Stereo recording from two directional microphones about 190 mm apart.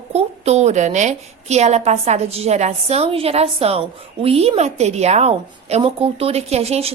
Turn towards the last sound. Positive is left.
turn(degrees=-35)  # may be behind; listen again after turning